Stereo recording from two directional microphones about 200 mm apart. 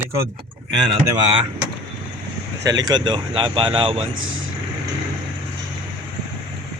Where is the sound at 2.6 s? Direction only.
20° right (ahead or behind).